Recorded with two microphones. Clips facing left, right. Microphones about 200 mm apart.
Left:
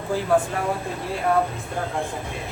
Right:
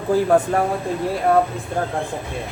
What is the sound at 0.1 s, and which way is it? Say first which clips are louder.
Speech: right 5 dB; 45° right (ahead or behind).